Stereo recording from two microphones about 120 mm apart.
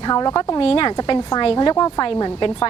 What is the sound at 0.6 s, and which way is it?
A woman's voice, 45° left (ahead or behind).